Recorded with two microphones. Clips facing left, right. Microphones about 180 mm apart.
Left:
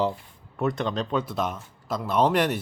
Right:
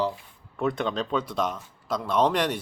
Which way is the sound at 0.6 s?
Centre (ahead or behind).